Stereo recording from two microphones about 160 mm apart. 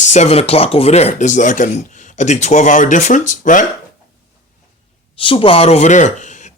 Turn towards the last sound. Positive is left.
turn(degrees=50)  # may be behind; listen again after turning